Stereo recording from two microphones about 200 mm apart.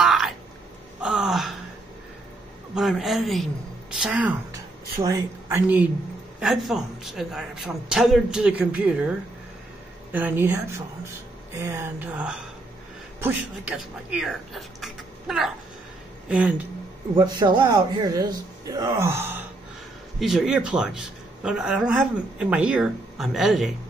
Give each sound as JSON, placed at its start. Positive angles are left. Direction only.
{"t": 0.0, "sound": "a sound", "side_deg": 0}
{"t": 1.0, "sound": "gasp", "side_deg": 0}
{"t": 2.7, "sound": "a woman's voice", "side_deg": 0}
{"t": 10.1, "sound": "a man's voice", "side_deg": -10}
{"t": 17.1, "sound": "a man's voice", "side_deg": -20}